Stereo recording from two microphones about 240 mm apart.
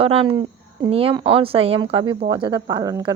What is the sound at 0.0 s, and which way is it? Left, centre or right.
Speech, right.